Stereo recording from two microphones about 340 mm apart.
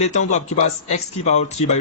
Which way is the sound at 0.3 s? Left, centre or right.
Centre.